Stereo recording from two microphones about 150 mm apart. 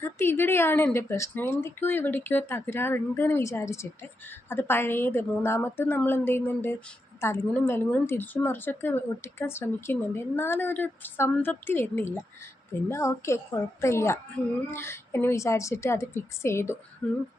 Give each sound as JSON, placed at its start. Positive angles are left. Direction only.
{"t": 0.0, "sound": "speech", "side_deg": 15}